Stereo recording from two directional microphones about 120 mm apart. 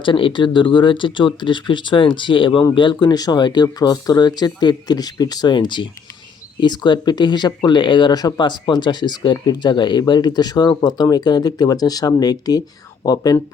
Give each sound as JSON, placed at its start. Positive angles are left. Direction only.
{"t": 0.0, "sound": "speech", "side_deg": 45}